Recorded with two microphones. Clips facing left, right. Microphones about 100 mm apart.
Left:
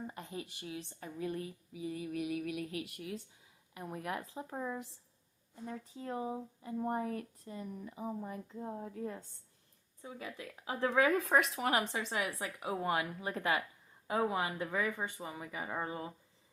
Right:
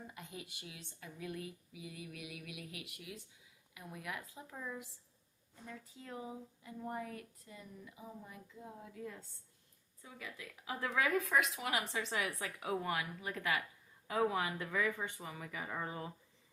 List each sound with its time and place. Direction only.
0.1 s speech: 40° left (ahead or behind)
12.0 s a woman's voice: 25° left (ahead or behind)